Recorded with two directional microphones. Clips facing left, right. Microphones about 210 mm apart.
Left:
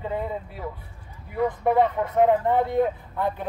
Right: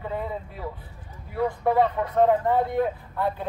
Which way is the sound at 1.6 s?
15° left (ahead or behind).